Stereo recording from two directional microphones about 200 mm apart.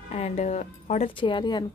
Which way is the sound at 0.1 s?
30° left (ahead or behind).